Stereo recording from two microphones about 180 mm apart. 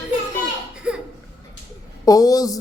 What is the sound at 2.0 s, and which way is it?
Speech, 20° left (ahead or behind).